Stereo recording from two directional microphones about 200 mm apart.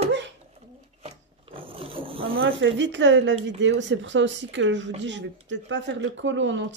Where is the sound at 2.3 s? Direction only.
70° right (ahead or behind).